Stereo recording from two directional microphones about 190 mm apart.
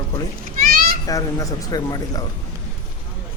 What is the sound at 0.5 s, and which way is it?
Children playing, 50° right (ahead or behind).